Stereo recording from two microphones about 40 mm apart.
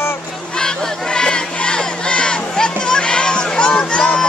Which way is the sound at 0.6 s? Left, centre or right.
Centre.